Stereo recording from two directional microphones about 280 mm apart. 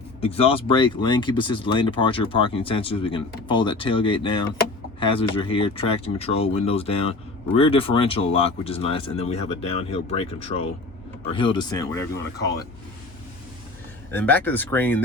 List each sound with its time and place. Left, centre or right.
0.2 s speech: centre
14.1 s speech: centre